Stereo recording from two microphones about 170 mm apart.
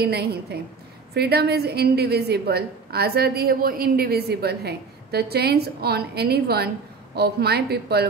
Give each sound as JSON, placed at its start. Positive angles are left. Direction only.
{"t": 0.0, "sound": "a woman's voice", "side_deg": -70}